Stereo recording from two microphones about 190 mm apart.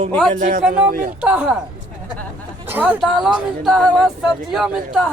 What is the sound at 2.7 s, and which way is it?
Speech, 10° right (ahead or behind).